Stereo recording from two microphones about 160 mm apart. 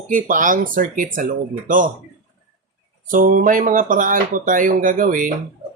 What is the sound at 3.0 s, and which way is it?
Speech, 55° right (ahead or behind).